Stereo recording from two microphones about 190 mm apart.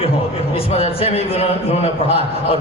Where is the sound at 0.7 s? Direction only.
30° left (ahead or behind).